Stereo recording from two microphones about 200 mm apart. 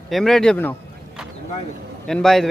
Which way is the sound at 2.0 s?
Centre (ahead or behind).